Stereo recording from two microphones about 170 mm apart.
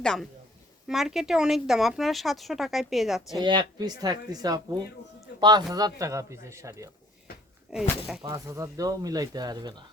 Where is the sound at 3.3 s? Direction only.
25° right (ahead or behind).